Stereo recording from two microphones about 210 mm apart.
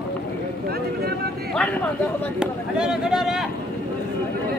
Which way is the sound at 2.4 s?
5° right (ahead or behind).